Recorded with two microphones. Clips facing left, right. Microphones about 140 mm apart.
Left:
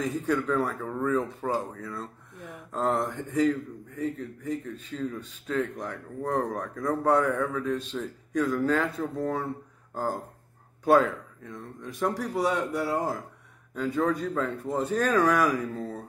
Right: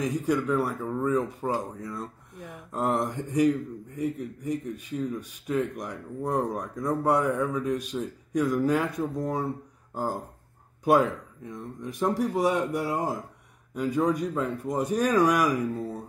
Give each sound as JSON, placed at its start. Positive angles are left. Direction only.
{"t": 0.0, "sound": "a man's voice", "side_deg": -15}